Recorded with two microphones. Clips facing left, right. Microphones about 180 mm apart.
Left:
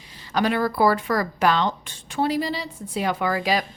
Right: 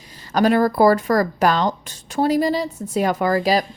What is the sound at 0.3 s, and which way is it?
Speech, 45° right (ahead or behind).